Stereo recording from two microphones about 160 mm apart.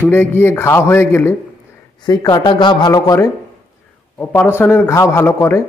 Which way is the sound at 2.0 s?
25° left (ahead or behind).